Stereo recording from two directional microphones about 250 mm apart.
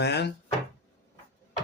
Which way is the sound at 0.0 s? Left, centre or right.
Left.